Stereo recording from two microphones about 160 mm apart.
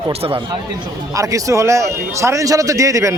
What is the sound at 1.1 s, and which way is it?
Speech, 20° right (ahead or behind).